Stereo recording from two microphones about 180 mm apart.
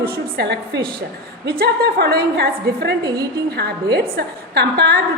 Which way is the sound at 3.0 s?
20° right (ahead or behind).